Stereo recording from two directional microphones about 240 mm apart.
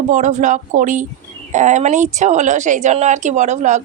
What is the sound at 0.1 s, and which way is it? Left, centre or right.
Speech, right.